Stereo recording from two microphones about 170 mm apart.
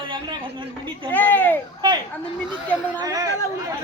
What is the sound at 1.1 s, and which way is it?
Speech, 10° left (ahead or behind).